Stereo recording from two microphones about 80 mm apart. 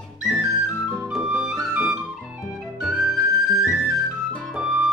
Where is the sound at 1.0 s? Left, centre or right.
Centre.